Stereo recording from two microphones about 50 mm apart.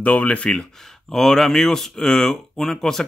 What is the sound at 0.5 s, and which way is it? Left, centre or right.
Speech, centre.